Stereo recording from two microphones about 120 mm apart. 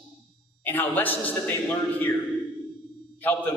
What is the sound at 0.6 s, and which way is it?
A man's voice, 15° left (ahead or behind).